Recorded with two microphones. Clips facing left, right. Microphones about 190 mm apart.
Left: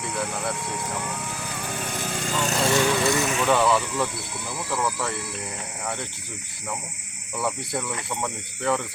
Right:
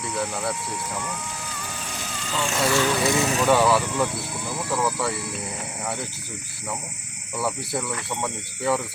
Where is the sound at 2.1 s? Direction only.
50° left (ahead or behind).